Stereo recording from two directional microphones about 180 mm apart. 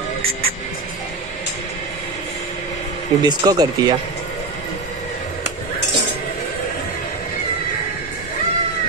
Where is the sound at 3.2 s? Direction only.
20° right (ahead or behind).